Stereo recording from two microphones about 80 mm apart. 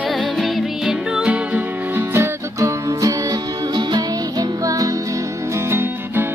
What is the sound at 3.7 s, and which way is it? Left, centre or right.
Music, right.